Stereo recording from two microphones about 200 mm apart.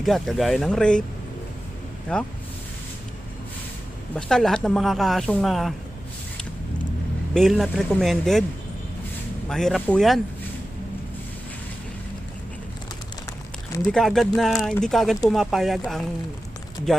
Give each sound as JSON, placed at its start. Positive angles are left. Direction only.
{"t": 0.0, "sound": "speech", "side_deg": 0}
{"t": 2.1, "sound": "speech", "side_deg": 5}
{"t": 4.1, "sound": "speech", "side_deg": 5}
{"t": 7.3, "sound": "speech", "side_deg": 0}
{"t": 9.5, "sound": "speech", "side_deg": 0}
{"t": 13.9, "sound": "speech", "side_deg": 0}